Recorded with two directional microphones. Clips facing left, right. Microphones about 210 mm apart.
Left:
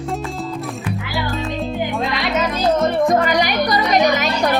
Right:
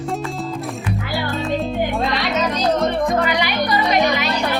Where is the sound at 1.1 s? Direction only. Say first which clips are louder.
Right 3 dB; centre (ahead or behind).